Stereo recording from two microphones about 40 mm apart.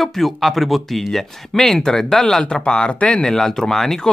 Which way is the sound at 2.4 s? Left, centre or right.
Left.